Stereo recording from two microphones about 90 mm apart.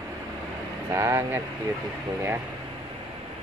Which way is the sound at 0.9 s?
35° right (ahead or behind).